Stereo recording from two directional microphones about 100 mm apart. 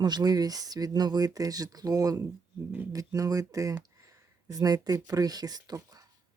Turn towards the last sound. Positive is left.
turn(degrees=-40)  # may be behind; listen again after turning